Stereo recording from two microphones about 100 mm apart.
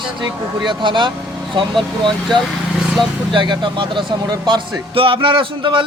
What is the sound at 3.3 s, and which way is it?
A man's voice, 50° right (ahead or behind).